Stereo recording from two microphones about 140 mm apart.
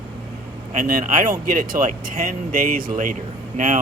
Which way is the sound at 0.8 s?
75° right (ahead or behind).